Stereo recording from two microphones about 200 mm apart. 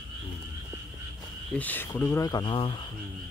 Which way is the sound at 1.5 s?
10° left (ahead or behind).